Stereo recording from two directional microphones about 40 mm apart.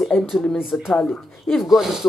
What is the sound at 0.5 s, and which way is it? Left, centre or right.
Speech, centre.